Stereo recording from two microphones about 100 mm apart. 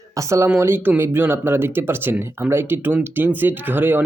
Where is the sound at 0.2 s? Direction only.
30° right (ahead or behind).